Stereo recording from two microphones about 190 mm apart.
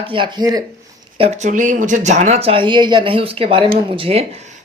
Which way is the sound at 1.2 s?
35° right (ahead or behind).